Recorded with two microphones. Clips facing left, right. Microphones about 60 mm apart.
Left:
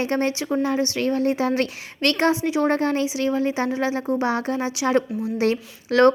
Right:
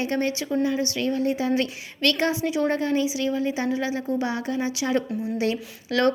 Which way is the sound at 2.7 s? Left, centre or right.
Left.